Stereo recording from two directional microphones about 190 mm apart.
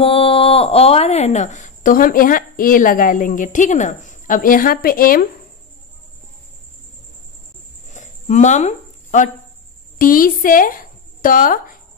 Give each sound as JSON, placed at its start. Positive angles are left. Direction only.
{"t": 0.0, "sound": "speech", "side_deg": 30}
{"t": 7.9, "sound": "a sound", "side_deg": 40}
{"t": 9.9, "sound": "a woman's voice", "side_deg": 45}